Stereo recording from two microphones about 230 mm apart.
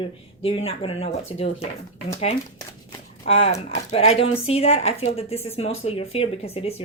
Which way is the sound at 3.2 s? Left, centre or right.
Left.